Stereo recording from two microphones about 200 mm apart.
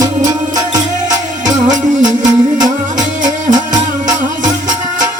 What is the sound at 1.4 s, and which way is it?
Music, 40° right (ahead or behind).